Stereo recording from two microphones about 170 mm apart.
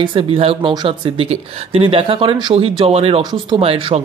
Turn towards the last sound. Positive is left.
turn(degrees=-35)  # may be behind; listen again after turning